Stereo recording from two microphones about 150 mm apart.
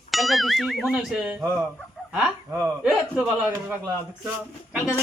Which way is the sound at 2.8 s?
10° right (ahead or behind).